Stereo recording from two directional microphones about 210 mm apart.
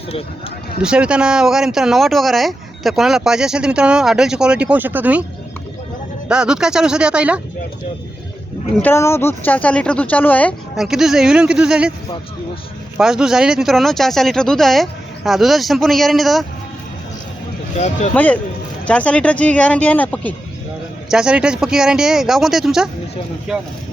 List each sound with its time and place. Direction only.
0.8 s speech: 5° right (ahead or behind)
6.2 s speech: 5° right (ahead or behind)
8.8 s speech: 10° left (ahead or behind)
13.0 s speech: centre (ahead or behind)
17.7 s speech: 35° left (ahead or behind)
18.1 s speech: 5° left (ahead or behind)
21.1 s speech: 5° right (ahead or behind)